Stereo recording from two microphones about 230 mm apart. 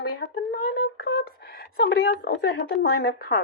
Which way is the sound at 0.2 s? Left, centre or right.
Left.